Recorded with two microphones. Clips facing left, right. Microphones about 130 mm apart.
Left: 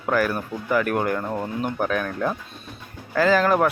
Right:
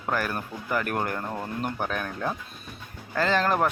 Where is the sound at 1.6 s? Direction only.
Centre (ahead or behind).